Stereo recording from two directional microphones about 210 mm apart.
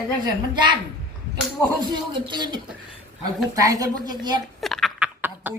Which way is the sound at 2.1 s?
20° right (ahead or behind).